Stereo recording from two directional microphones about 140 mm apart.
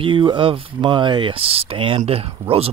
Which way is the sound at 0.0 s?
35° right (ahead or behind).